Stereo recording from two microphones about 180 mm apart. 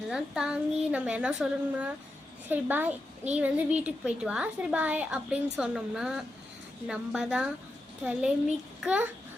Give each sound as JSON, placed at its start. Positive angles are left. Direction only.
{"t": 0.1, "sound": "a woman's voice", "side_deg": -5}